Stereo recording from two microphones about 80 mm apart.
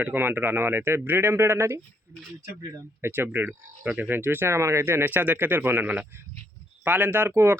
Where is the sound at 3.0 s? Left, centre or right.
Right.